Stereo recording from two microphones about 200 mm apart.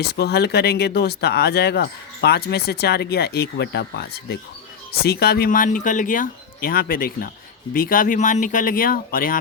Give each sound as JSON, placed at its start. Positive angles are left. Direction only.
{"t": 0.0, "sound": "speech", "side_deg": 55}